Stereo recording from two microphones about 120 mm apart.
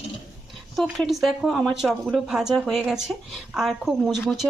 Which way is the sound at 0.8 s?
Centre (ahead or behind).